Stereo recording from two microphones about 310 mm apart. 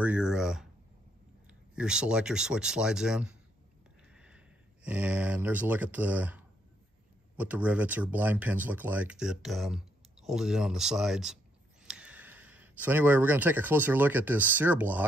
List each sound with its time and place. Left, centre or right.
0.0 s speech: centre
1.8 s speech: centre
4.1 s a sound: centre
4.8 s speech: centre